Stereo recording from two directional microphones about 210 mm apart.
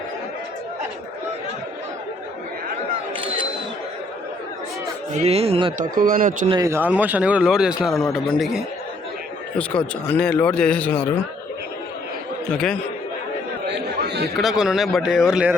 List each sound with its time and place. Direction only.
5.1 s speech: 30° right (ahead or behind)
5.9 s a man's voice: 40° right (ahead or behind)
6.5 s a man's voice: 15° right (ahead or behind); by 11.1 s 5° left (ahead or behind)
12.5 s speech: 5° left (ahead or behind)
13.7 s chatter: 50° right (ahead or behind)
14.3 s speech: centre (ahead or behind)